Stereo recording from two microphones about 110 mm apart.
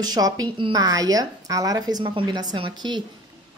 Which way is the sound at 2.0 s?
50° right (ahead or behind).